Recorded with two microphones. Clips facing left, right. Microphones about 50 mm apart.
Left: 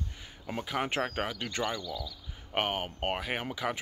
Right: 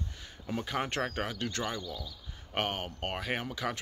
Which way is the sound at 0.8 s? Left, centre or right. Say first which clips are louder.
Left 2 dB; centre.